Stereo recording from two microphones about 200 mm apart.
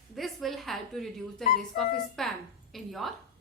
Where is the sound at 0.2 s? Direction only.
Centre (ahead or behind).